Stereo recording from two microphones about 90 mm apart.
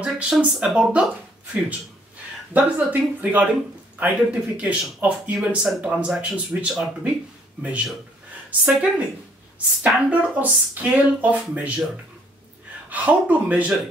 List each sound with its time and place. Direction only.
0.0 s speech: 10° right (ahead or behind)
2.5 s speech: 20° right (ahead or behind)
12.9 s speech: 15° right (ahead or behind)